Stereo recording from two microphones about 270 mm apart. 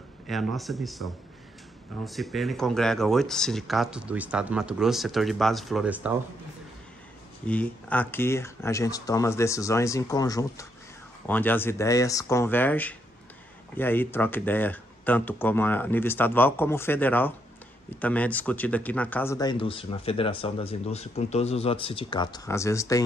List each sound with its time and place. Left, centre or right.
0.3 s speech: centre
7.4 s speech: centre